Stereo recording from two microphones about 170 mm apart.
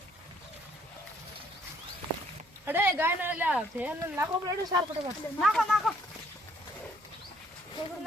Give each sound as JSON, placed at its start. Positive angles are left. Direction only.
{"t": 2.6, "sound": "speech", "side_deg": -10}
{"t": 5.4, "sound": "speech", "side_deg": 0}